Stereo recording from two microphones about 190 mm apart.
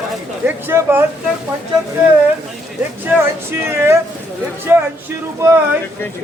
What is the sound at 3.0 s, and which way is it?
Speech, 15° right (ahead or behind).